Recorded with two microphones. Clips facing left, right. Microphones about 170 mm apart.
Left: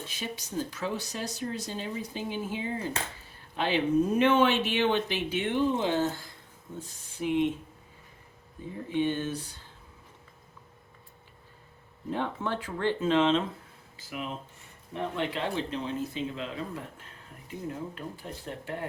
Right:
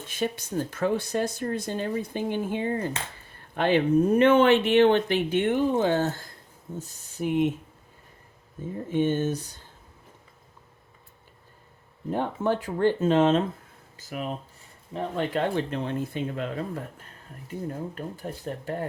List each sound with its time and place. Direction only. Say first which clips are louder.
0.1 s speech: right 11 dB; 55° right (ahead or behind)
8.9 s speech: right 4 dB; 45° right (ahead or behind)
12.1 s speech: right 6 dB; 45° right (ahead or behind)